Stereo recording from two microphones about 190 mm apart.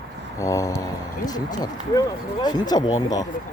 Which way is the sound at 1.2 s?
20° left (ahead or behind).